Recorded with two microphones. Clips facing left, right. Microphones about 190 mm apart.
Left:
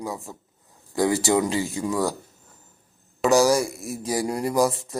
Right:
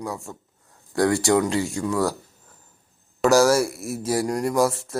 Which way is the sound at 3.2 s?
Centre (ahead or behind).